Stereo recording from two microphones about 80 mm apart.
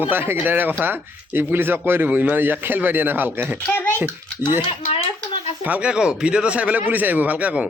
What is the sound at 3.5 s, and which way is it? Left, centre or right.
Speech, centre.